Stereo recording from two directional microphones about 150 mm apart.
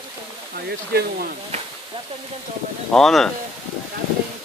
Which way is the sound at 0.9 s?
90° right.